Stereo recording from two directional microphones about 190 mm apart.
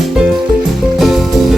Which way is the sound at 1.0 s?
Centre (ahead or behind).